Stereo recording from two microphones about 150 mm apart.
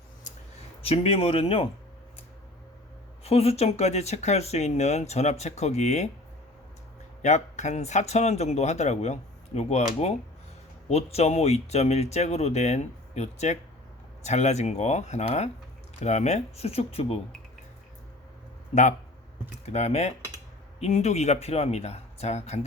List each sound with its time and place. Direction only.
0.8 s speech: 40° left (ahead or behind)
3.2 s speech: 40° left (ahead or behind)
7.2 s speech: 50° left (ahead or behind)
18.7 s speech: 55° left (ahead or behind)